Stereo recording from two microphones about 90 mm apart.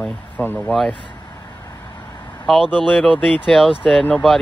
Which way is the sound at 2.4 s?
Centre (ahead or behind).